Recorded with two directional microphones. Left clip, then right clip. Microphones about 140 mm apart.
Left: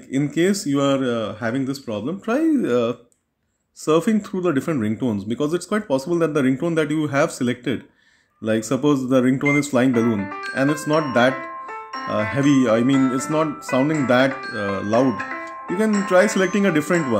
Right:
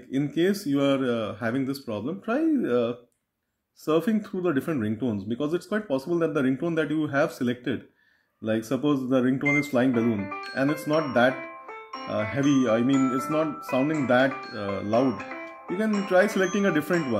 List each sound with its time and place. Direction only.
0.1 s speech: 25° left (ahead or behind)
16.3 s speech: 20° left (ahead or behind)